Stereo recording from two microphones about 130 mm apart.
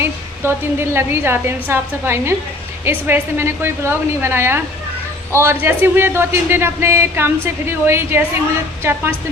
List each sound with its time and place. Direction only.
0.0 s a woman's voice: 20° right (ahead or behind)